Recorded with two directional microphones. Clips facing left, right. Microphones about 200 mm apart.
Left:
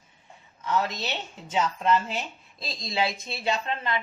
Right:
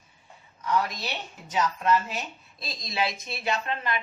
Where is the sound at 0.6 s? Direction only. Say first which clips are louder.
Even; 25° left (ahead or behind).